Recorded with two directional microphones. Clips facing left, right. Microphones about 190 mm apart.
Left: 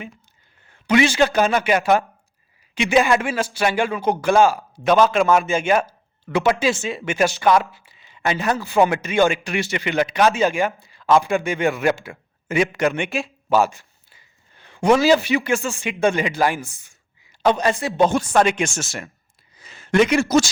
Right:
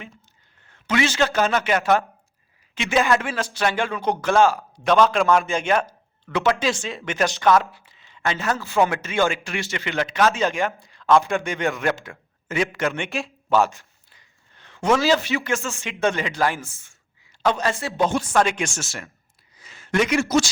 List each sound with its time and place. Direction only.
0.7 s a man's voice: 15° left (ahead or behind)
13.1 s speech: centre (ahead or behind); by 18.0 s 15° left (ahead or behind)
18.0 s speech: 35° left (ahead or behind)
18.3 s speech: 20° left (ahead or behind)
19.5 s a sound: 25° left (ahead or behind)